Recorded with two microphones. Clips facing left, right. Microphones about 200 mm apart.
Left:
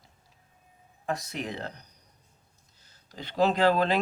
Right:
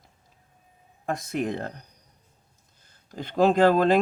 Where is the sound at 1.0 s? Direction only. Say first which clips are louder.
Right 5 dB; 50° right (ahead or behind).